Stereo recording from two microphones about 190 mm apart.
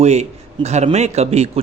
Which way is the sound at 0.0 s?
35° right (ahead or behind).